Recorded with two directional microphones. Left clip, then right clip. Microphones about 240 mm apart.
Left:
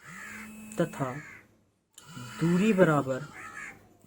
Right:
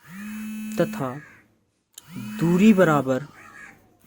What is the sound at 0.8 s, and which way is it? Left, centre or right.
Speech, right.